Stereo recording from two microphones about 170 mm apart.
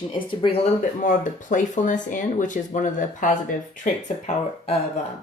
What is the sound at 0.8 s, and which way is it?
Speech, 50° left (ahead or behind).